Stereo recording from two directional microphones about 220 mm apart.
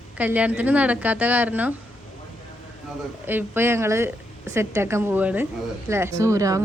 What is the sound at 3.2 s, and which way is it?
Speech, 10° right (ahead or behind).